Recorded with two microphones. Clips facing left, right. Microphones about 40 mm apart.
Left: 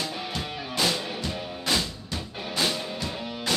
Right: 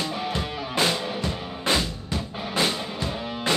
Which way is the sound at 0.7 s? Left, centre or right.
Right.